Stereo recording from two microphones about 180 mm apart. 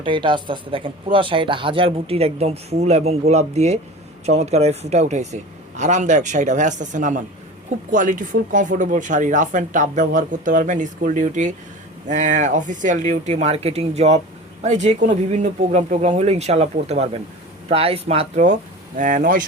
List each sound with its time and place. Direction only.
0.0 s a man's voice: 25° right (ahead or behind); by 19.5 s 50° right (ahead or behind)